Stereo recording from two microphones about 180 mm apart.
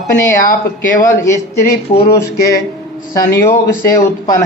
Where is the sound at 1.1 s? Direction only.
15° left (ahead or behind).